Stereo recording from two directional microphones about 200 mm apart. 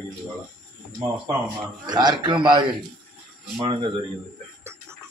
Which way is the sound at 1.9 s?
20° right (ahead or behind).